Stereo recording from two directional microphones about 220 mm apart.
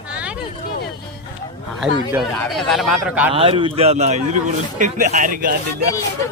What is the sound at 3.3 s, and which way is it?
Speech, 25° right (ahead or behind).